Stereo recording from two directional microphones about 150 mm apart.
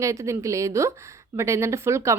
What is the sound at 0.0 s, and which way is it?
Speech, 20° right (ahead or behind).